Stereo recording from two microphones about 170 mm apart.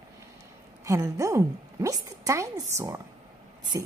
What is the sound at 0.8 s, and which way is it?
A woman's voice, 20° right (ahead or behind).